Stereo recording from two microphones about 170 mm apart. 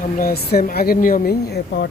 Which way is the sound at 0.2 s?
55° left (ahead or behind).